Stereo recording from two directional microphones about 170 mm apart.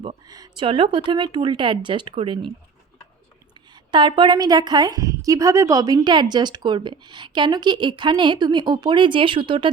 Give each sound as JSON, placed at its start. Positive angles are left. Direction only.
{"t": 0.0, "sound": "a woman's voice", "side_deg": -25}
{"t": 3.9, "sound": "a woman's voice", "side_deg": -30}